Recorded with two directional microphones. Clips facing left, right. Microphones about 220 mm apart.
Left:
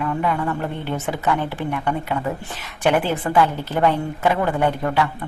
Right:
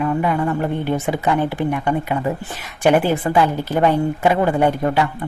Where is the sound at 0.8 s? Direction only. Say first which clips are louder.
Right 4 dB; 10° right (ahead or behind).